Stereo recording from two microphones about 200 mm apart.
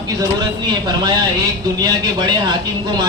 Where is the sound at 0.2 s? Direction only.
20° right (ahead or behind).